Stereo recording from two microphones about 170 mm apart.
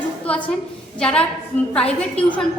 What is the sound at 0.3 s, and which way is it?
A woman's voice, 10° left (ahead or behind).